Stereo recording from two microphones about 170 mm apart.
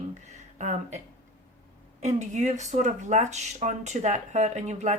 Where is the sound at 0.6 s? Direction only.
45° right (ahead or behind).